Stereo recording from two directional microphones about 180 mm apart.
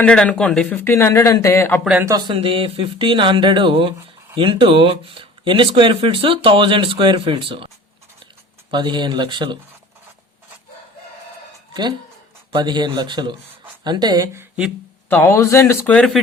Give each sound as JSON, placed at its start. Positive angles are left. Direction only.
{"t": 0.0, "sound": "a man's voice", "side_deg": 5}
{"t": 1.8, "sound": "a man's voice", "side_deg": -5}
{"t": 2.0, "sound": "speech", "side_deg": -25}
{"t": 8.7, "sound": "speech", "side_deg": -25}
{"t": 11.7, "sound": "speech", "side_deg": -25}
{"t": 15.1, "sound": "a man's voice", "side_deg": 15}